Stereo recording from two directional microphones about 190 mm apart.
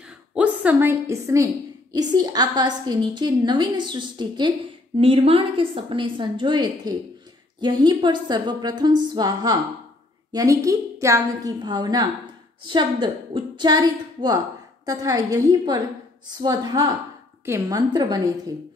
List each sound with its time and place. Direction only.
0.0 s a woman's voice: 5° right (ahead or behind); by 18.3 s 20° right (ahead or behind)